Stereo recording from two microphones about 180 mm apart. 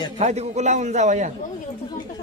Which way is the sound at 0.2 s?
35° right (ahead or behind).